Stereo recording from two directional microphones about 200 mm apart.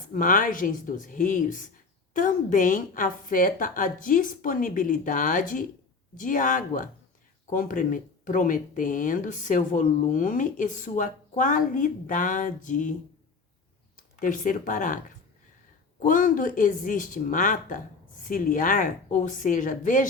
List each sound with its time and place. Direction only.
0.1 s speech: 45° left (ahead or behind)
13.9 s speech: 40° left (ahead or behind)
16.0 s speech: 40° left (ahead or behind)